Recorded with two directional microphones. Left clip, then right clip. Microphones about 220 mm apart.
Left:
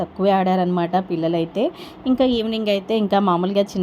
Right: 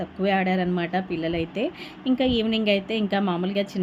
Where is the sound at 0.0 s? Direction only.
15° left (ahead or behind).